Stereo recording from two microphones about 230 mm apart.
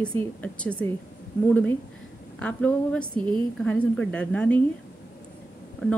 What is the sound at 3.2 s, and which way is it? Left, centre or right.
Speech, centre.